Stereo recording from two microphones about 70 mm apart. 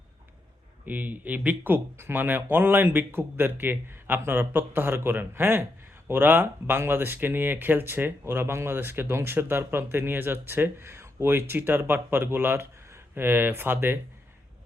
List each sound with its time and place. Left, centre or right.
0.9 s speech: right